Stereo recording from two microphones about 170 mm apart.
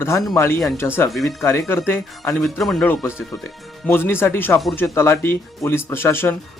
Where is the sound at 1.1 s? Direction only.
Centre (ahead or behind).